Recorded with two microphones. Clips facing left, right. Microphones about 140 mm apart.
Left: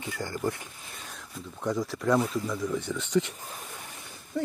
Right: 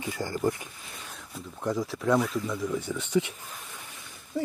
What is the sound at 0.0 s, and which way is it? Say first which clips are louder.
Speech: right 3 dB; 15° right (ahead or behind).